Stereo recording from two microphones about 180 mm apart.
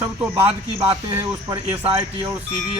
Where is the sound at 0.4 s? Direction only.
30° right (ahead or behind).